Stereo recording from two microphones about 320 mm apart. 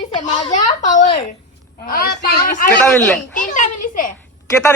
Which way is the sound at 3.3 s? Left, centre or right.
Left.